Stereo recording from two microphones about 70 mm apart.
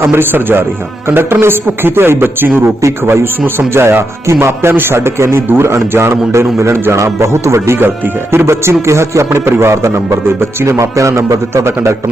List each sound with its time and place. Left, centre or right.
0.0 s speech: right